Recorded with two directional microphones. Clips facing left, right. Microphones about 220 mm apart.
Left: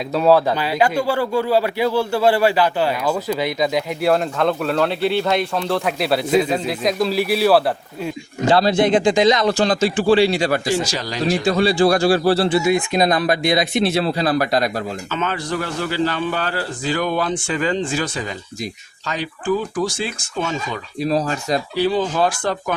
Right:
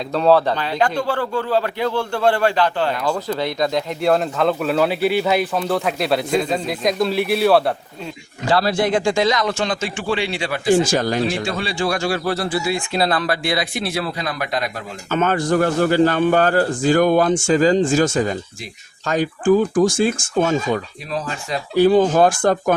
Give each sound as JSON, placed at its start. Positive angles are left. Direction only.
{"t": 0.1, "sound": "a man's voice", "side_deg": 5}
{"t": 8.4, "sound": "speech", "side_deg": 20}
{"t": 9.5, "sound": "a man's voice", "side_deg": 35}
{"t": 10.8, "sound": "a man's voice", "side_deg": -50}
{"t": 11.4, "sound": "speech", "side_deg": 35}
{"t": 15.1, "sound": "a man's voice", "side_deg": -50}
{"t": 21.0, "sound": "a man's voice", "side_deg": 35}
{"t": 21.8, "sound": "a man's voice", "side_deg": -50}